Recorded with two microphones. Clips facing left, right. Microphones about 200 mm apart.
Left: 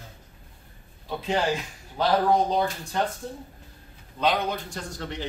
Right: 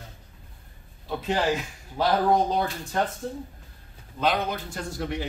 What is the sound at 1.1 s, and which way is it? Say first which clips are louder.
Speech: even; centre (ahead or behind).